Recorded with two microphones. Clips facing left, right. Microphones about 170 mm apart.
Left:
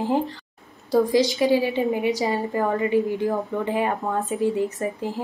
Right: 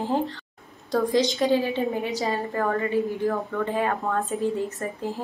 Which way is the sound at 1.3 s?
5° left (ahead or behind).